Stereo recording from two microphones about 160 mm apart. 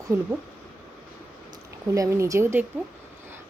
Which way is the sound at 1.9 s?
20° right (ahead or behind).